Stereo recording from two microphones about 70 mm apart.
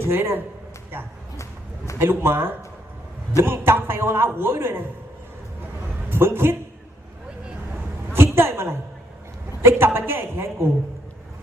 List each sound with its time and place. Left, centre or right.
0.0 s a woman's voice: right
2.0 s a woman's voice: right
6.1 s a man's voice: right
8.1 s a sound: right
9.6 s a woman's voice: right